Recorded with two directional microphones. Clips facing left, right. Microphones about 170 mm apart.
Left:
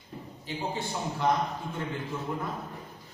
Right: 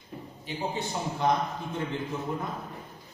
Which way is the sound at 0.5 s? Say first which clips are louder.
Right 1 dB; 20° right (ahead or behind).